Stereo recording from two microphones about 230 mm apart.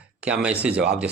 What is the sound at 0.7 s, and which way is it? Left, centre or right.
Speech, right.